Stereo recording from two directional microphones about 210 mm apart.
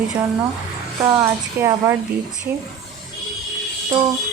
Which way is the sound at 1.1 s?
10° right (ahead or behind).